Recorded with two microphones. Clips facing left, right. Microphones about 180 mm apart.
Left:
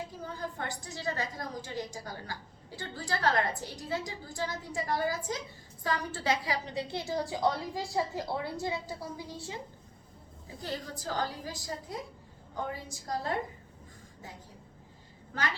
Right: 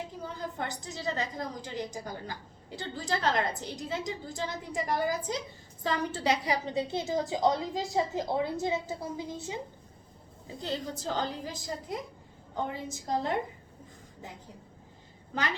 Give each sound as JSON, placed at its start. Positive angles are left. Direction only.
{"t": 0.7, "sound": "a woman's voice", "side_deg": -20}
{"t": 10.6, "sound": "a woman's voice", "side_deg": -25}